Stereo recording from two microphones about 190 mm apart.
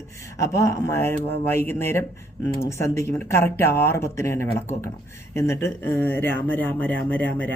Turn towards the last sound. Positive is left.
turn(degrees=10)  # may be behind; listen again after turning